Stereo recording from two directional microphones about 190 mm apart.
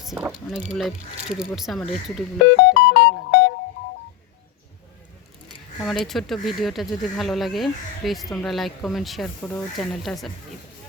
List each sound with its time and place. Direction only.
0.0 s speech: centre (ahead or behind)
2.6 s music: 60° left (ahead or behind)
5.8 s speech: centre (ahead or behind)